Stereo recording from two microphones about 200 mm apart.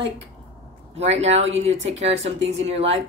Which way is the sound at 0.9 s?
30° right (ahead or behind).